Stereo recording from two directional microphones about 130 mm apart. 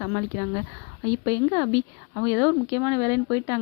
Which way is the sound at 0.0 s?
25° left (ahead or behind).